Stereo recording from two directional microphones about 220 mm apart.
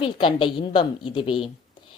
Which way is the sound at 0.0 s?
25° left (ahead or behind).